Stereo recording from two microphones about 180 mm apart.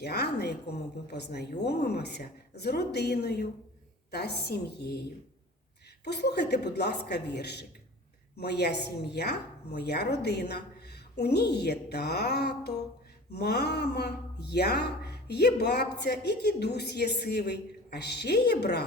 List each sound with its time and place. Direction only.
0.0 s speech: 65° left (ahead or behind)
6.1 s a woman's voice: 65° left (ahead or behind)